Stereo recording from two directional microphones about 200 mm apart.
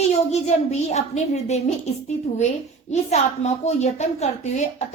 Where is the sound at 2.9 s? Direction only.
35° left (ahead or behind).